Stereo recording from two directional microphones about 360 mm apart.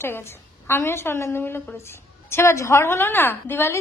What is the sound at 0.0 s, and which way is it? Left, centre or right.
A woman's voice, centre.